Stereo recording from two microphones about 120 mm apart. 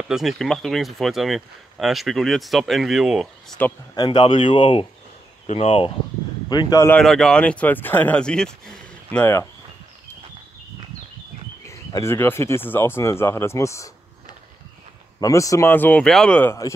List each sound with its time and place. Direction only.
0.1 s speech: centre (ahead or behind)
3.6 s speech: 15° left (ahead or behind)
3.9 s speech: 40° left (ahead or behind)
6.5 s speech: 35° left (ahead or behind)
7.0 s speech: 5° left (ahead or behind)
9.2 s speech: 20° left (ahead or behind)
11.6 s speech: 25° left (ahead or behind)
15.1 s speech: 30° left (ahead or behind); by 16.5 s 10° left (ahead or behind)